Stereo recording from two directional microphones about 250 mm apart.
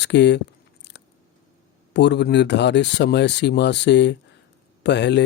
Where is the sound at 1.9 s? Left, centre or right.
Left.